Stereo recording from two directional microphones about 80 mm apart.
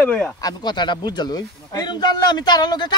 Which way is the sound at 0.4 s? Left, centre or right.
Left.